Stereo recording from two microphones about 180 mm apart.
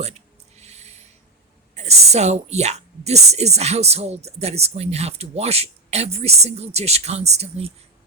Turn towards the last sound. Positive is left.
turn(degrees=-35)  # may be behind; listen again after turning